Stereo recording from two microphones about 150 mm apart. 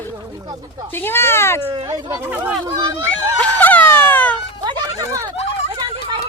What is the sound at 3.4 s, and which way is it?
Wail, 10° left (ahead or behind).